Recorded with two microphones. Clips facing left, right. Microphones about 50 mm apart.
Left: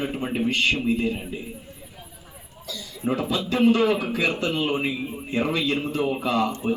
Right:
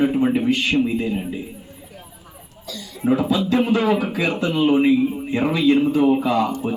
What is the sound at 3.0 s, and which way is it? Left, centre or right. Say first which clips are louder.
Speech: right 6 dB; centre.